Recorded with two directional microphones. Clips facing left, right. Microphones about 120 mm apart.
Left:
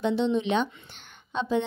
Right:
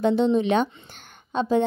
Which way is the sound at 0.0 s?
45° right (ahead or behind).